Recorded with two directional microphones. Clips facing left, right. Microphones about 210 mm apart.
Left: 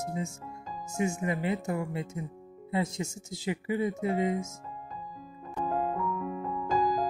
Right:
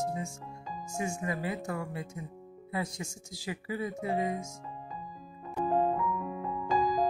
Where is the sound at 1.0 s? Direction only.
20° left (ahead or behind).